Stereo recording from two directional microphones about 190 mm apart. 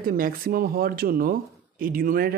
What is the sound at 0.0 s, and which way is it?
Speech, 50° right (ahead or behind).